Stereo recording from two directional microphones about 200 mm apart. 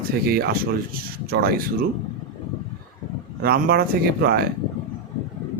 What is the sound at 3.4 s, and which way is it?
Speech, 50° right (ahead or behind).